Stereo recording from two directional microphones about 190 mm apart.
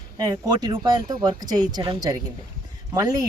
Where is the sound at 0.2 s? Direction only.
20° right (ahead or behind).